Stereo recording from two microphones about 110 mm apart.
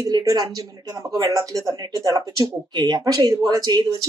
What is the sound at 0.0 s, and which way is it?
Speech, 35° right (ahead or behind).